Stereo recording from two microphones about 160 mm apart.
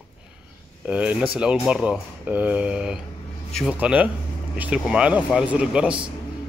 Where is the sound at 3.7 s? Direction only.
10° right (ahead or behind).